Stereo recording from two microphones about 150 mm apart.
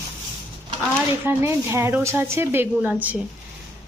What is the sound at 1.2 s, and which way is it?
A woman's voice, 15° right (ahead or behind).